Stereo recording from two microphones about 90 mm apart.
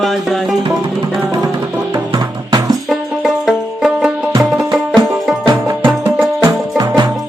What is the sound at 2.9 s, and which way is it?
Music, 5° right (ahead or behind).